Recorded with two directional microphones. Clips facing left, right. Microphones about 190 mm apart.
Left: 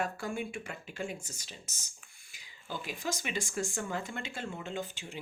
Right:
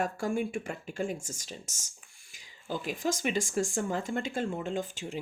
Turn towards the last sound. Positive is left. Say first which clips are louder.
# right 5 dB
turn(degrees=-45)  # may be behind; listen again after turning